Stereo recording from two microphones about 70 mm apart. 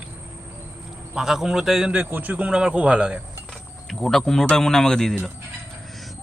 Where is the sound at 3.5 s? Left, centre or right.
Centre.